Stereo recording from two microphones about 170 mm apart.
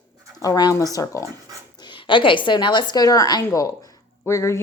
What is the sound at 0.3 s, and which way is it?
A woman's voice, 20° left (ahead or behind).